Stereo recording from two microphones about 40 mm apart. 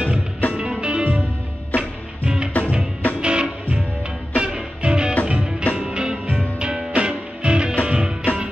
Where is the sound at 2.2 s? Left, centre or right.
Right.